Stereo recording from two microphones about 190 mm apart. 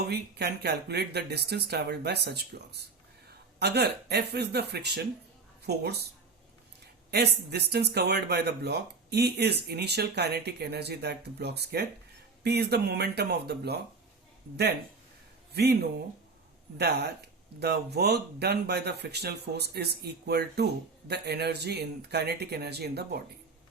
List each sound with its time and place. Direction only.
0.1 s speech: 60° right (ahead or behind)
7.1 s speech: 60° right (ahead or behind)
15.5 s speech: 60° right (ahead or behind)